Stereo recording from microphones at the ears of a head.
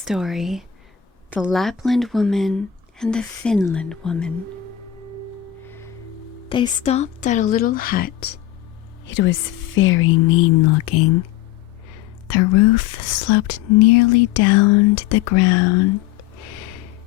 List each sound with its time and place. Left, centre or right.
0.0 s speech: centre
1.7 s speech: centre
3.2 s speech: left
4.4 s music: right
6.5 s speech: left